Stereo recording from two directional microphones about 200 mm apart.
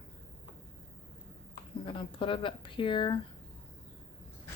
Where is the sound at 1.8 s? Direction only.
25° left (ahead or behind).